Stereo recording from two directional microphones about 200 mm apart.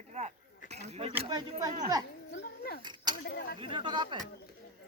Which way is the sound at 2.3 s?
55° left (ahead or behind).